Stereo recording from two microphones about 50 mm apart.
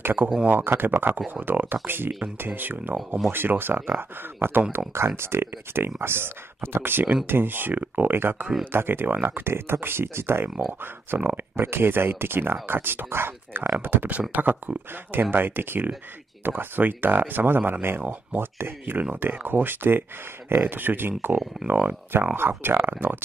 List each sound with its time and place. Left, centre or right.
0.0 s speech: right
11.5 s speech: right
22.2 s speech: right